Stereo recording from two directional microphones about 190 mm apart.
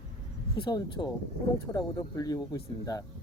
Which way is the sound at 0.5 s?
25° left (ahead or behind).